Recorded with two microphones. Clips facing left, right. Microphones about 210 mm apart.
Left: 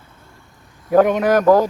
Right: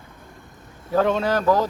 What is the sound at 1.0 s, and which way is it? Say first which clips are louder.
Speech: left 6 dB; 15° left (ahead or behind).